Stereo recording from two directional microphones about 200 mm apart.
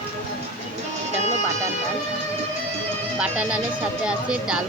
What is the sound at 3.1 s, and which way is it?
Speech, 5° right (ahead or behind).